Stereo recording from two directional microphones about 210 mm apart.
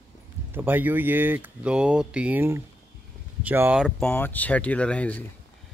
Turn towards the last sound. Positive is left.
turn(degrees=5)  # may be behind; listen again after turning